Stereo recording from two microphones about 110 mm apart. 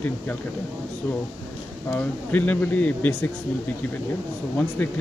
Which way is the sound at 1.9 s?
15° left (ahead or behind).